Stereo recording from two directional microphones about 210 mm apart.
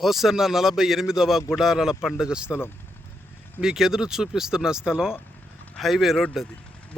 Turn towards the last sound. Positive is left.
turn(degrees=0)  # may be behind; listen again after turning